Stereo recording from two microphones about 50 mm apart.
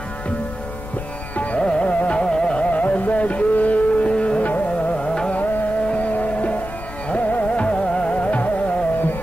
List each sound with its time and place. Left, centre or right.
1.3 s music: left
2.2 s carnatic music: centre
2.7 s music: left
4.9 s carnatic music: centre
5.3 s music: left